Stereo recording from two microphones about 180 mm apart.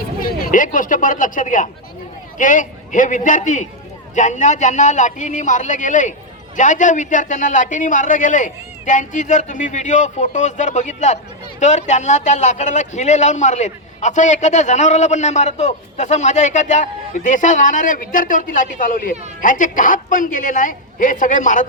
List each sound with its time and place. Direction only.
0.3 s a man's voice: 50° left (ahead or behind)